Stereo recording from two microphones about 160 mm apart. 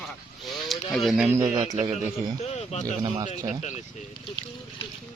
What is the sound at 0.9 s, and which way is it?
Speech, centre (ahead or behind).